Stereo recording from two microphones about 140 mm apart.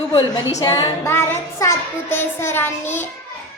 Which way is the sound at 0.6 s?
25° left (ahead or behind).